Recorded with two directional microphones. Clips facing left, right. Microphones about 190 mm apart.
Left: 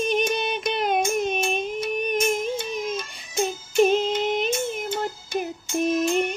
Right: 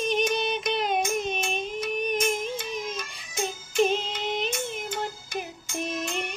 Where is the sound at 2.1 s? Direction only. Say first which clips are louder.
Left 4 dB; 25° left (ahead or behind).